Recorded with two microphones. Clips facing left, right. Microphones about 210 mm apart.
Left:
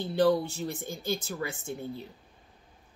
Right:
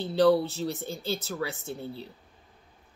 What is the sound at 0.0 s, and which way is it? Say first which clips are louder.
Speech: right 3 dB; 15° left (ahead or behind).